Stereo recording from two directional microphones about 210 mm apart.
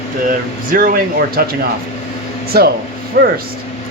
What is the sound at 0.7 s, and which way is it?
A man's voice, 45° right (ahead or behind).